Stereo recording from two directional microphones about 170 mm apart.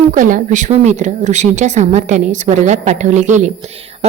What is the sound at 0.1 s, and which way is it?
A woman's voice, 50° right (ahead or behind).